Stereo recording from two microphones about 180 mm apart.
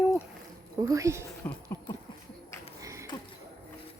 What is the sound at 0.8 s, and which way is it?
Speech, 20° right (ahead or behind).